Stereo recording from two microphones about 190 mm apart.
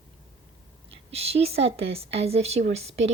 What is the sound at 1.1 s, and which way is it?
A woman's voice, 30° right (ahead or behind).